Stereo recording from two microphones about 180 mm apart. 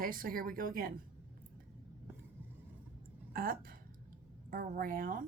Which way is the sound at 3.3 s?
55° right (ahead or behind).